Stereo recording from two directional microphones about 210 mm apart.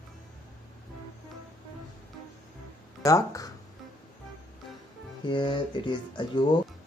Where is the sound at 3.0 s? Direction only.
15° left (ahead or behind).